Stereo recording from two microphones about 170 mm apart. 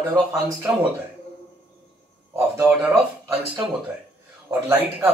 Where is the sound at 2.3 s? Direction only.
15° right (ahead or behind).